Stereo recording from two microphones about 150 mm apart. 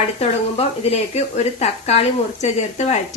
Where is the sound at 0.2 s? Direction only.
45° left (ahead or behind).